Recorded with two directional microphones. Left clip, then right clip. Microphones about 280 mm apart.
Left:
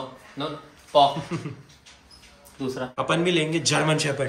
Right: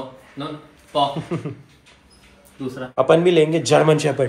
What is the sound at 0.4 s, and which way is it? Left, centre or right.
Speech, left.